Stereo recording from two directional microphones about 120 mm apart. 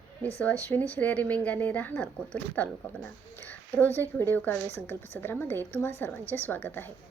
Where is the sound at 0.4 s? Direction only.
15° left (ahead or behind).